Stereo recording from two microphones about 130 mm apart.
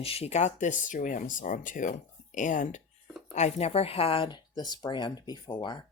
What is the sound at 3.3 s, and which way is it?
Speech, 55° left (ahead or behind).